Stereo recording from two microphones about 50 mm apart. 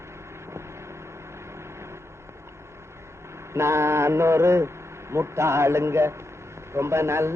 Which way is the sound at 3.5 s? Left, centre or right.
Right.